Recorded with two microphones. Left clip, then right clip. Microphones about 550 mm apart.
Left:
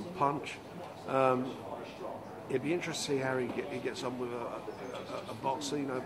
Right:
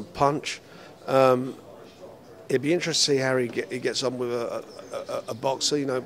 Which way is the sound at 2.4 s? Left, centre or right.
Right.